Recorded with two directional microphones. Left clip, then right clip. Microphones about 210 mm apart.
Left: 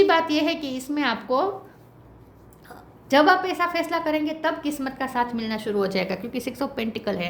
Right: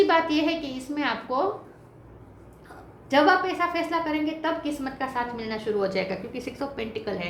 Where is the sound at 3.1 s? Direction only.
50° left (ahead or behind).